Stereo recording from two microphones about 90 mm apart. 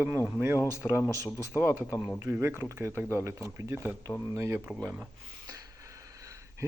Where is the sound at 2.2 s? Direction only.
30° right (ahead or behind).